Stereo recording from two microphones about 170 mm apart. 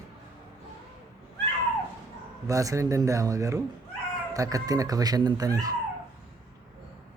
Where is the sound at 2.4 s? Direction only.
20° right (ahead or behind).